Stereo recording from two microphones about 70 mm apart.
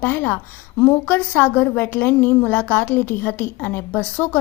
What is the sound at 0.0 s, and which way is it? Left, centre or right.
A woman's voice, left.